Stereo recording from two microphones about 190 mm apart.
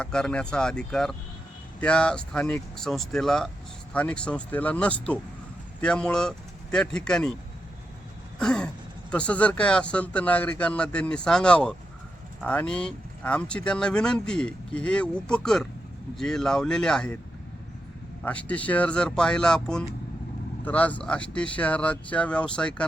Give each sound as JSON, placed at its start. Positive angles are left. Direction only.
{"t": 0.0, "sound": "speech", "side_deg": 5}
{"t": 8.4, "sound": "speech", "side_deg": 5}
{"t": 18.2, "sound": "speech", "side_deg": 5}